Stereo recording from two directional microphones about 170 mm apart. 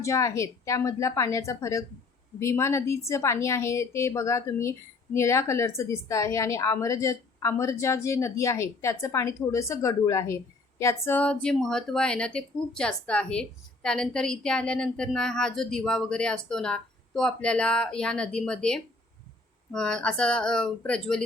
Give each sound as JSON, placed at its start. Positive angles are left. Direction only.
{"t": 0.0, "sound": "a woman's voice", "side_deg": 20}